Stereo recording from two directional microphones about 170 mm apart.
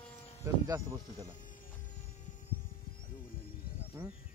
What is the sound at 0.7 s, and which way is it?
Speech, 20° right (ahead or behind).